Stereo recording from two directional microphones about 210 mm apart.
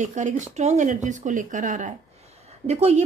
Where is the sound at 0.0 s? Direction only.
35° right (ahead or behind).